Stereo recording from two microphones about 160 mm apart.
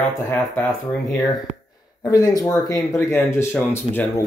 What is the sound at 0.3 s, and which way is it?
Speech, 10° left (ahead or behind).